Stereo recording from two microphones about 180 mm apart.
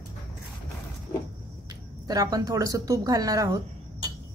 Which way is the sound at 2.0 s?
20° right (ahead or behind).